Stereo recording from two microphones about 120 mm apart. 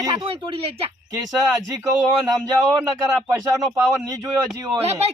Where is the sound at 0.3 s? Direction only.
50° right (ahead or behind).